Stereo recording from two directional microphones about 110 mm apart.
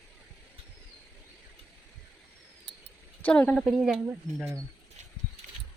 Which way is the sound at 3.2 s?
10° left (ahead or behind).